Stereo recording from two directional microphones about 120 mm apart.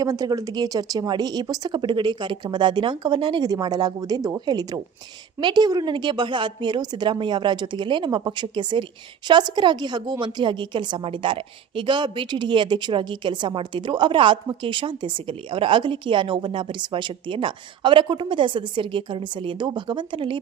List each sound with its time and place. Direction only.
0.0 s a woman's voice: 30° right (ahead or behind)